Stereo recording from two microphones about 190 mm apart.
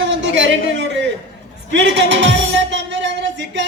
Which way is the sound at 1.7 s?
70° right (ahead or behind).